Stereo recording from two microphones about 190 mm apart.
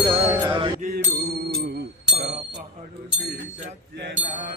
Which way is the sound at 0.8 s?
55° right (ahead or behind).